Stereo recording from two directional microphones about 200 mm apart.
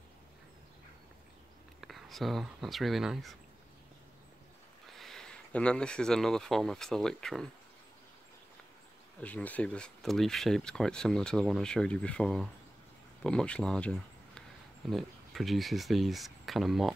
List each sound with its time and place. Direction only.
1.8 s speech: centre (ahead or behind)
4.9 s speech: centre (ahead or behind)
9.2 s speech: 5° left (ahead or behind)